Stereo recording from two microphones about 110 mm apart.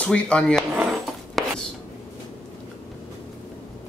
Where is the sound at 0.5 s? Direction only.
5° right (ahead or behind).